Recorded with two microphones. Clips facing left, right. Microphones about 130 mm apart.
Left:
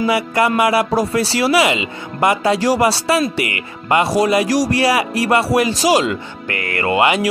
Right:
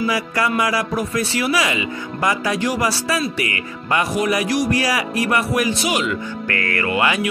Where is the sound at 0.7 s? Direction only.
30° left (ahead or behind).